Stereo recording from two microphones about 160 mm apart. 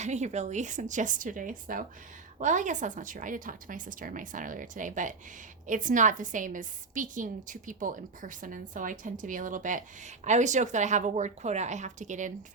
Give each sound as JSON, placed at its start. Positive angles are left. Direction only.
{"t": 0.0, "sound": "a woman's voice", "side_deg": -45}